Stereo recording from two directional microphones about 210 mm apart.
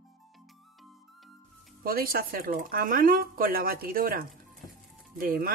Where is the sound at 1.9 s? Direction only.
45° right (ahead or behind).